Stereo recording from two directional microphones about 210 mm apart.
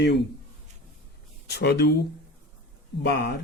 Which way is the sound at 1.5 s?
50° left (ahead or behind).